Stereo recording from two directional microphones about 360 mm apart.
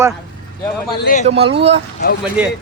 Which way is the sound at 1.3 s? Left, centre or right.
Centre.